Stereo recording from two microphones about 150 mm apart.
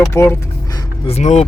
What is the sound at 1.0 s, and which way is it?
Speech, 45° left (ahead or behind).